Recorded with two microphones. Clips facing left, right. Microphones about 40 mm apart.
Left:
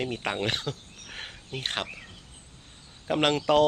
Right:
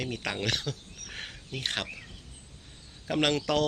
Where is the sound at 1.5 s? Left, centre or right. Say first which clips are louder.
Left 1 dB; left.